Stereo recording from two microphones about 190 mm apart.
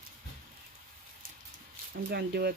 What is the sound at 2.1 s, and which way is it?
Speech, 55° right (ahead or behind).